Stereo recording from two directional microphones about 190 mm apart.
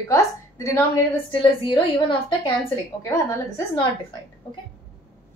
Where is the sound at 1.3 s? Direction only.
25° left (ahead or behind).